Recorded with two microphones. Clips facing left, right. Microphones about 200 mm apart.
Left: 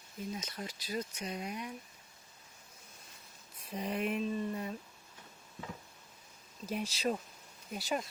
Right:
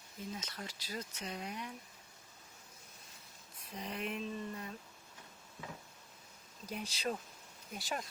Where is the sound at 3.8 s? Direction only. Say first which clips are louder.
Left 6 dB; 10° left (ahead or behind).